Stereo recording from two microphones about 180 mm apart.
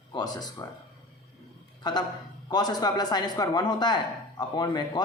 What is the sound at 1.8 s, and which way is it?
Speech, 25° left (ahead or behind).